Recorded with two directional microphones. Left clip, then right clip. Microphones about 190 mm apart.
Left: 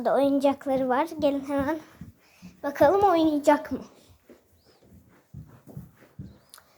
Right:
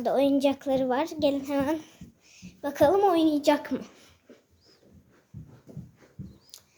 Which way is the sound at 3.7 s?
20° right (ahead or behind).